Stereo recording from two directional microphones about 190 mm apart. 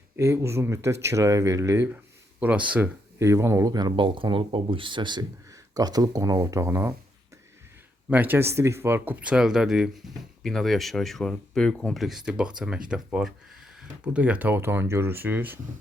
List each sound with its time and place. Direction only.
0.2 s speech: 15° right (ahead or behind)
8.1 s speech: 10° right (ahead or behind)